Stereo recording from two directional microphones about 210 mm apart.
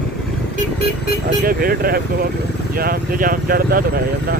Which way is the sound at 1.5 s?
45° right (ahead or behind).